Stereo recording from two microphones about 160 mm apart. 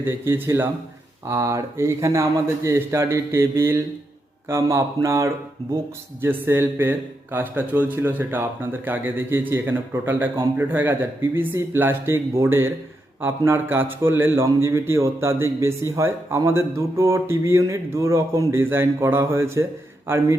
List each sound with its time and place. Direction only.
0.0 s a man's voice: 15° right (ahead or behind)